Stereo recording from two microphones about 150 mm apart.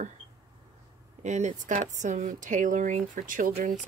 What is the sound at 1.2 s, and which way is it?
Speech, 50° right (ahead or behind).